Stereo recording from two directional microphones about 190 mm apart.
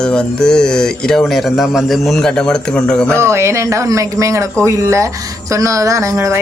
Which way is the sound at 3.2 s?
15° right (ahead or behind).